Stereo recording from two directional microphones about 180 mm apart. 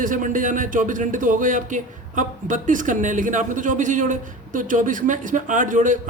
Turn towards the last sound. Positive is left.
turn(degrees=-45)  # may be behind; listen again after turning